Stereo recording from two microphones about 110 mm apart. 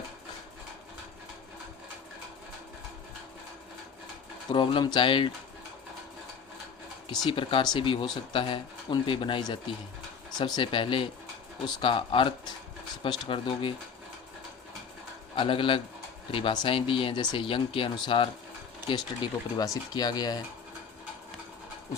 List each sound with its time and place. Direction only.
4.5 s speech: 50° left (ahead or behind)
7.3 s speech: 50° left (ahead or behind)
15.4 s speech: 55° left (ahead or behind)